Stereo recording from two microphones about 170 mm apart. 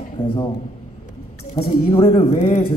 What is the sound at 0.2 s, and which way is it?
Speech, 25° left (ahead or behind).